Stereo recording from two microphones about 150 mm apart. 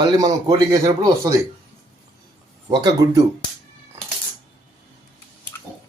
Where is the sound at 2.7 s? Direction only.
25° right (ahead or behind).